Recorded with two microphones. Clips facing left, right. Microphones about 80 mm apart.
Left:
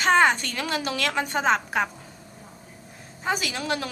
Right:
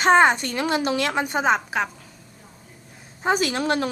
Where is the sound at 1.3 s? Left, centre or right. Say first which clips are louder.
Right 2 dB; centre.